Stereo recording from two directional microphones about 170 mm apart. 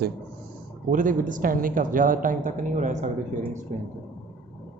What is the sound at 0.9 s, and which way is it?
A woman's voice, 50° right (ahead or behind).